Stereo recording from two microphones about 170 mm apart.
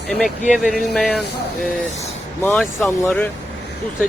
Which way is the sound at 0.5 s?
Centre (ahead or behind).